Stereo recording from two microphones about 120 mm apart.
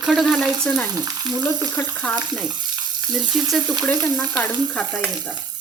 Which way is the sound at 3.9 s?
10° left (ahead or behind).